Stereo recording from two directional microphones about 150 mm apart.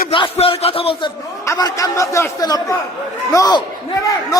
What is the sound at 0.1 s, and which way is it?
A man's voice, 35° left (ahead or behind).